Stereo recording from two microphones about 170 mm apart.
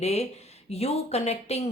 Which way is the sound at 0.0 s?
40° left (ahead or behind).